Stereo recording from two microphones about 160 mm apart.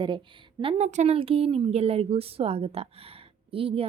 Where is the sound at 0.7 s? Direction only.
40° right (ahead or behind).